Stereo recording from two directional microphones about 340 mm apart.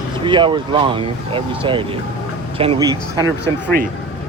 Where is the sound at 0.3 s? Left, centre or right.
Centre.